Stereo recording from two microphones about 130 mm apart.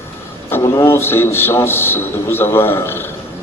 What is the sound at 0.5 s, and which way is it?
A man's voice, 20° left (ahead or behind).